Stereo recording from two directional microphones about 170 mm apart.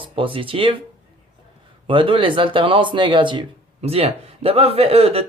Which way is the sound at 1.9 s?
30° right (ahead or behind).